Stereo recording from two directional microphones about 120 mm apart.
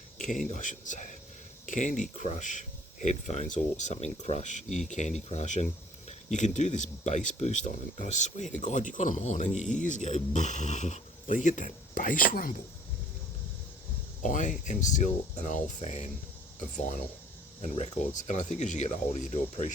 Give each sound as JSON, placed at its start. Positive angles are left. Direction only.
{"t": 0.3, "sound": "a man's voice", "side_deg": 90}
{"t": 14.2, "sound": "a man's voice", "side_deg": 90}
{"t": 17.6, "sound": "a man's voice", "side_deg": 85}